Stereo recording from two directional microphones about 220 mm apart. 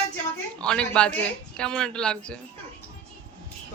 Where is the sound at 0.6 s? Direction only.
5° left (ahead or behind).